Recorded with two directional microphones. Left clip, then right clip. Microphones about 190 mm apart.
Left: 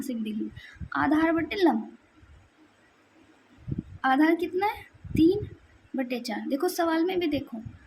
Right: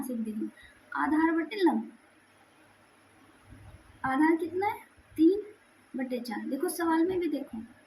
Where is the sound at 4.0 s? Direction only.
55° left (ahead or behind).